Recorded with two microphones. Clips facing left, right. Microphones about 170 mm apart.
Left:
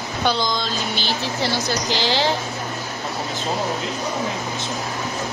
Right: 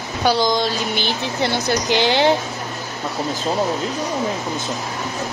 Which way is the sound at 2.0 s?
55° right (ahead or behind).